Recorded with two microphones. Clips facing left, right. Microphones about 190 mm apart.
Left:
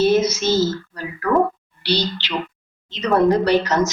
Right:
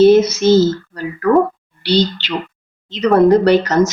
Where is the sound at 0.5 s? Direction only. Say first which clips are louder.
Right 7 dB; 55° right (ahead or behind).